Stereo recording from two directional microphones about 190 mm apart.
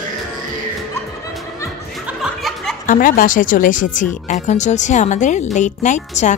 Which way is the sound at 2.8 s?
45° left (ahead or behind).